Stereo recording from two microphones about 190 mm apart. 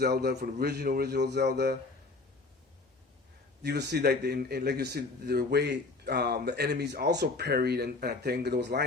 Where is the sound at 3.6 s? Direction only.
60° right (ahead or behind).